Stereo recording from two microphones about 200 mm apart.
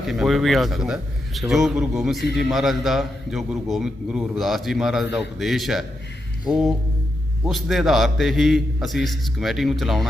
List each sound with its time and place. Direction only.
0.1 s a man's voice: centre (ahead or behind)